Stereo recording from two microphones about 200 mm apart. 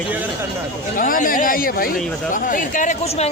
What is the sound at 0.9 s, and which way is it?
Speech, 45° left (ahead or behind).